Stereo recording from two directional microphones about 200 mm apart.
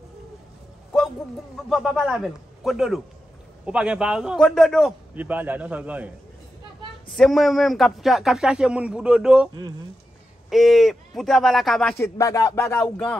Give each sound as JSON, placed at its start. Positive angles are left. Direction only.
{"t": 1.7, "sound": "a man's voice", "side_deg": 0}
{"t": 10.5, "sound": "a man's voice", "side_deg": 0}
{"t": 12.0, "sound": "music", "side_deg": 15}
{"t": 12.7, "sound": "a man's voice", "side_deg": 5}